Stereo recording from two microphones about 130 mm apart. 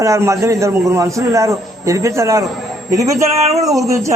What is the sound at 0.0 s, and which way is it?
A man's voice, 25° right (ahead or behind).